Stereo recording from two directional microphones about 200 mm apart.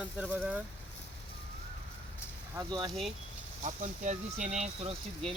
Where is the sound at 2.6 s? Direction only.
20° right (ahead or behind).